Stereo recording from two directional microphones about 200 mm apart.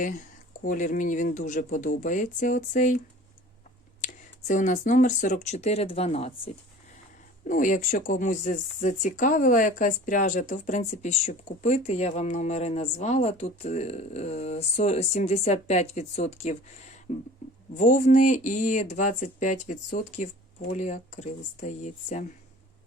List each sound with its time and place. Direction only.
0.6 s speech: 40° left (ahead or behind)
4.0 s speech: 40° left (ahead or behind)
7.4 s speech: 40° left (ahead or behind)